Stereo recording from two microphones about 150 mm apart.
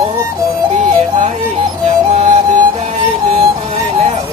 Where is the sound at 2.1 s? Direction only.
45° right (ahead or behind).